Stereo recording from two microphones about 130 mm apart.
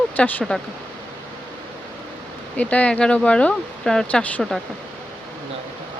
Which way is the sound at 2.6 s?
10° left (ahead or behind).